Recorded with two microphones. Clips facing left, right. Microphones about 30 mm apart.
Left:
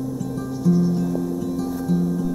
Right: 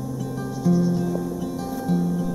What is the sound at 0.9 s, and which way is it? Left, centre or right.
Music, centre.